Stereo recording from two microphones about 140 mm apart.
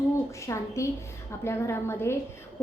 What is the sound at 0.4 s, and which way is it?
A woman's voice, 20° left (ahead or behind).